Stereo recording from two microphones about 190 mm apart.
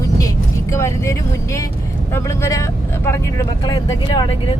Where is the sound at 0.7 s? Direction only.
15° left (ahead or behind).